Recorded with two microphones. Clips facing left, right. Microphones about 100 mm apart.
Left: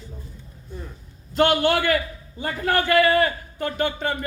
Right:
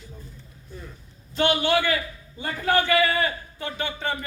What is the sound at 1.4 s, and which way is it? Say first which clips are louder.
Speech: left 4 dB; 50° left (ahead or behind).